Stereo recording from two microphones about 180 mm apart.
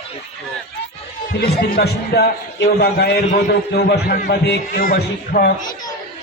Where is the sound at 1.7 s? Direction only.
60° left (ahead or behind).